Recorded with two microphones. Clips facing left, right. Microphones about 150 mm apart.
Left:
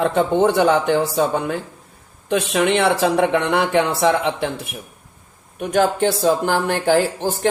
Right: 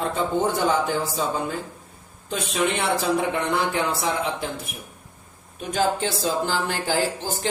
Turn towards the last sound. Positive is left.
turn(degrees=60)  # may be behind; listen again after turning